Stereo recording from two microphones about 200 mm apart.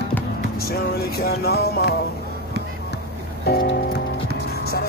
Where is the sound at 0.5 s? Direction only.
50° left (ahead or behind).